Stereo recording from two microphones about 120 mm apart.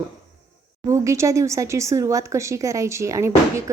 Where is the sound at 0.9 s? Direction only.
25° right (ahead or behind).